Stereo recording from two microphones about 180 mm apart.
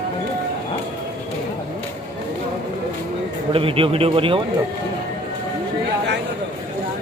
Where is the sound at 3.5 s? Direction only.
30° right (ahead or behind).